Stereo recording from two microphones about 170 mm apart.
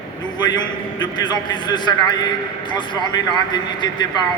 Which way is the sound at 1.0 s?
25° left (ahead or behind).